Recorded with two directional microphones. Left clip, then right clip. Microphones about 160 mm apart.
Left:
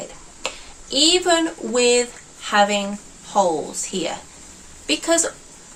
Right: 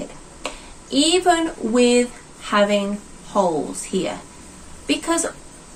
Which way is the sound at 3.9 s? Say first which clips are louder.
Right 2 dB; 15° left (ahead or behind).